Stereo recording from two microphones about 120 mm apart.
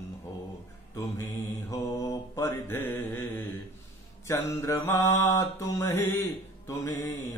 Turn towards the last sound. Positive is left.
turn(degrees=20)  # may be behind; listen again after turning